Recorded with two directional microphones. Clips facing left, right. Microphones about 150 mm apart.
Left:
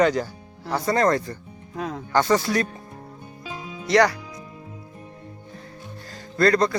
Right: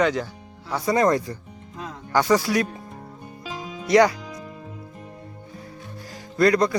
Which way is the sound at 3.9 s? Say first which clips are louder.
Right 2 dB; 20° right (ahead or behind).